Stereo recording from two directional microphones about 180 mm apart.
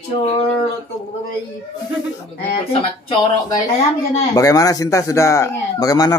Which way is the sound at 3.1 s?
30° left (ahead or behind).